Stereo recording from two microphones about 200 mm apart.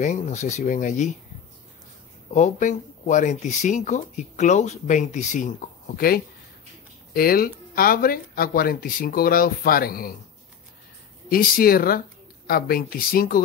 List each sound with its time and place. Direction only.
0.0 s speech: 35° left (ahead or behind)
2.3 s speech: 40° left (ahead or behind)
5.9 s speech: 50° left (ahead or behind)
11.2 s speech: 45° left (ahead or behind)